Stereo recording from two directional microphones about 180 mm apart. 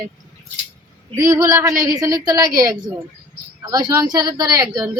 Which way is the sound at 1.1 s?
15° right (ahead or behind).